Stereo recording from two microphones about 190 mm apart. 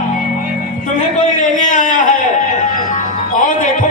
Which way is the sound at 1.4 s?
40° left (ahead or behind).